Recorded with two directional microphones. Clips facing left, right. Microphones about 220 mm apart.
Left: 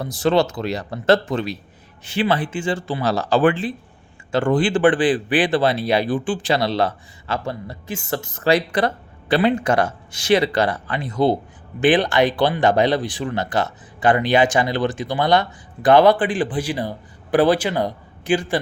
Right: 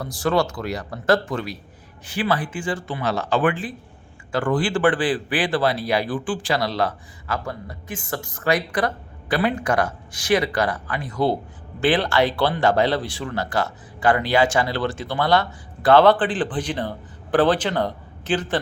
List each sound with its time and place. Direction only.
0.0 s speech: 20° left (ahead or behind)